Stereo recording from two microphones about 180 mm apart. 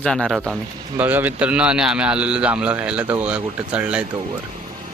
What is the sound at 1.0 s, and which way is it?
A man's voice, 10° right (ahead or behind).